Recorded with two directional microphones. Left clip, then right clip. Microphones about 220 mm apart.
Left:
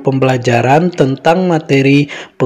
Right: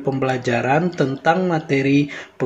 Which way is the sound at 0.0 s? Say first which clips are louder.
Left 8 dB; 40° left (ahead or behind).